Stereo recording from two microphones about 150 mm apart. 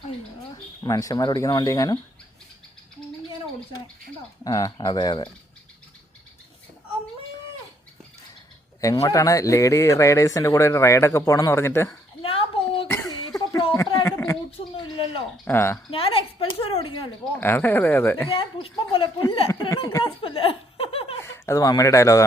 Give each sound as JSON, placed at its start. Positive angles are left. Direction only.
{"t": 0.9, "sound": "speech", "side_deg": 25}
{"t": 4.4, "sound": "speech", "side_deg": 25}
{"t": 8.8, "sound": "speech", "side_deg": 20}
{"t": 12.2, "sound": "a sound", "side_deg": 40}
{"t": 12.9, "sound": "cough", "side_deg": 20}
{"t": 13.7, "sound": "a sound", "side_deg": 20}
{"t": 14.8, "sound": "a woman's voice", "side_deg": 35}
{"t": 15.4, "sound": "speech", "side_deg": 15}
{"t": 15.9, "sound": "a woman's voice", "side_deg": 40}
{"t": 17.3, "sound": "speech", "side_deg": 15}
{"t": 18.3, "sound": "a woman's voice", "side_deg": 35}
{"t": 19.5, "sound": "speech", "side_deg": 20}
{"t": 20.2, "sound": "a sound", "side_deg": 40}
{"t": 21.3, "sound": "speech", "side_deg": 20}